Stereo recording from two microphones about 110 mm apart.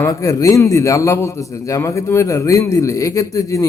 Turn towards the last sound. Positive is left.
turn(degrees=30)  # may be behind; listen again after turning